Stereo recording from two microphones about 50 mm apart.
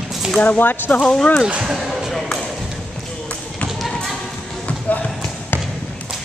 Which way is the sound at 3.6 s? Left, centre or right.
Left.